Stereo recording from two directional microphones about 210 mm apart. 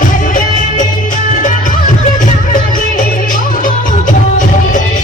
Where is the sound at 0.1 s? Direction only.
40° left (ahead or behind).